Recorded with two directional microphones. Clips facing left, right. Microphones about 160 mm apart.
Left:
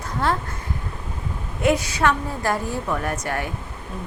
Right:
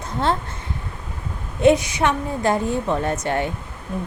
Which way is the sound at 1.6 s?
20° right (ahead or behind).